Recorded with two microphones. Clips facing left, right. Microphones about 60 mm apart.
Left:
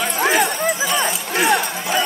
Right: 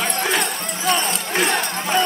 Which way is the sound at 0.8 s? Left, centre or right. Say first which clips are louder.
Left 1 dB; centre.